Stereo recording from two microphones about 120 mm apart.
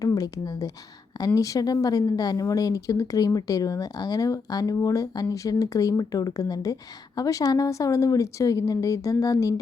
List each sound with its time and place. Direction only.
0.0 s a woman's voice: 30° left (ahead or behind)